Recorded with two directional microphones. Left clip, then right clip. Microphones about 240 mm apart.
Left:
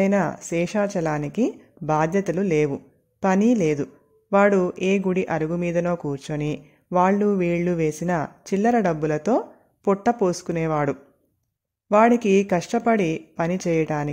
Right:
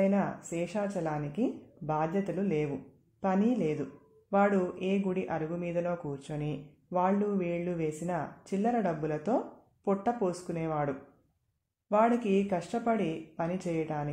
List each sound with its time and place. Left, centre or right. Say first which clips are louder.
0.0 s speech: left 8 dB; left